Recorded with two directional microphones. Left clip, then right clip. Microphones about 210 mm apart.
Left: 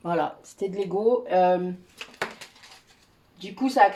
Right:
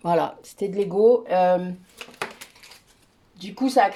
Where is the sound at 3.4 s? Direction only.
45° right (ahead or behind).